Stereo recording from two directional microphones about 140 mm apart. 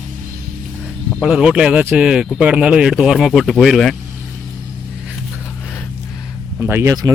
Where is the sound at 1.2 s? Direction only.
5° right (ahead or behind).